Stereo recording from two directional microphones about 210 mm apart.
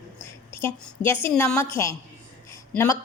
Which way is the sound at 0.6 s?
10° left (ahead or behind).